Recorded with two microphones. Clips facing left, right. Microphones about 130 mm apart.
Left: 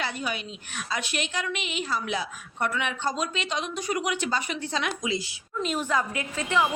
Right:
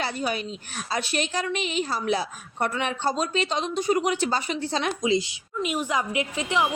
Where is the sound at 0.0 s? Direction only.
35° right (ahead or behind).